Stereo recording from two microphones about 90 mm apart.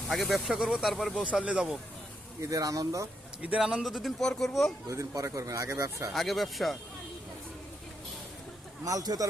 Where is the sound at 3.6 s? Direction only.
10° right (ahead or behind).